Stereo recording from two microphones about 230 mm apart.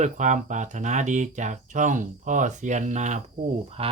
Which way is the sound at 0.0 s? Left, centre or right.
Right.